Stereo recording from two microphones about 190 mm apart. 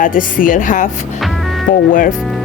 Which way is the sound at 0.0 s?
45° left (ahead or behind).